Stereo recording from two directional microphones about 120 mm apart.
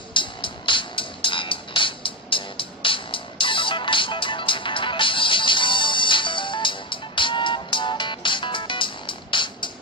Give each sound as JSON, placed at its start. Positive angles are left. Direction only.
{"t": 0.1, "sound": "music", "side_deg": 45}